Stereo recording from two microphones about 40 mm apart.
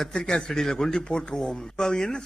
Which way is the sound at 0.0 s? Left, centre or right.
Centre.